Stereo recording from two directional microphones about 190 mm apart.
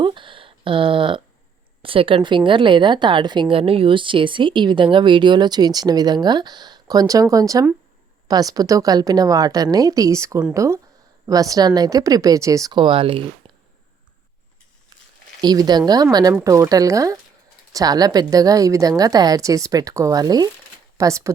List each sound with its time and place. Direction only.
0.0 s a woman's voice: 25° right (ahead or behind)
15.4 s a woman's voice: 20° right (ahead or behind)